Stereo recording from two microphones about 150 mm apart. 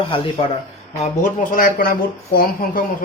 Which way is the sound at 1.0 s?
55° left (ahead or behind).